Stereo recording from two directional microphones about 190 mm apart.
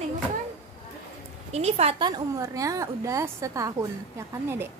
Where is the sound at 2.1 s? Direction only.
15° right (ahead or behind).